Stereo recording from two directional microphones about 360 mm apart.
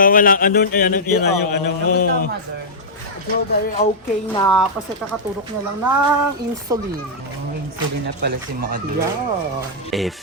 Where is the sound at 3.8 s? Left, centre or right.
Centre.